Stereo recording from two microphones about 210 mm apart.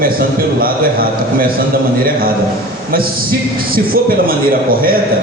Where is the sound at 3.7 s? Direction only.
45° right (ahead or behind).